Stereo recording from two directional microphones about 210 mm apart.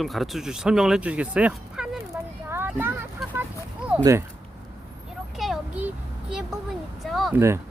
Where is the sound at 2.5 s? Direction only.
10° right (ahead or behind).